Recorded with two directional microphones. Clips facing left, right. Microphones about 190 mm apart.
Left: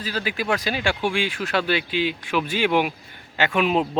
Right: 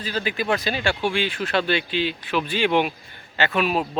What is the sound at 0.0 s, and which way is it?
Speech, 5° left (ahead or behind).